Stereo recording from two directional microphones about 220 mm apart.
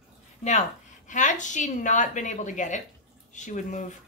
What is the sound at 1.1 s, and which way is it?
A woman's voice, 35° left (ahead or behind).